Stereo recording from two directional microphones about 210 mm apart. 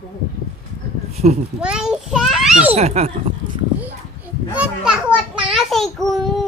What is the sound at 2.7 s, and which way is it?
Speech, 30° right (ahead or behind).